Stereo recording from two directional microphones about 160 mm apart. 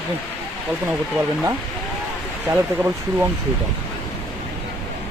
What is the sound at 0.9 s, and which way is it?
Speech, 15° right (ahead or behind).